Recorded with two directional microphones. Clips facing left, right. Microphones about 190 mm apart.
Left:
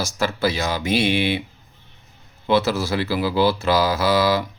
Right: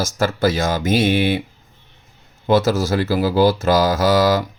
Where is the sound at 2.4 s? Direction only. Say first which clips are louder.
Right 3 dB; 45° right (ahead or behind).